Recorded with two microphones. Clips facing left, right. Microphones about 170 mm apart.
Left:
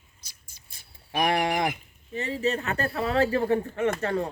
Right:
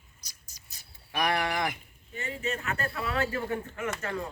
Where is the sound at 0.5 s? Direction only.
40° right (ahead or behind).